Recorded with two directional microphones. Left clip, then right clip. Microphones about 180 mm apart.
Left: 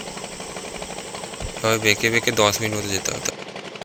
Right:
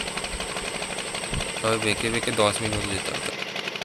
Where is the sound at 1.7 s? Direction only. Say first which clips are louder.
Left 6 dB; 15° left (ahead or behind).